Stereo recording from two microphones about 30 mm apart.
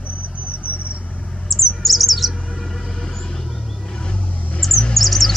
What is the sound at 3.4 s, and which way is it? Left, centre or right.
Vehicle, centre.